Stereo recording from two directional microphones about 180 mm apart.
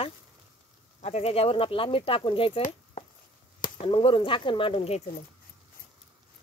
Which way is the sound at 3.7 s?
30° left (ahead or behind).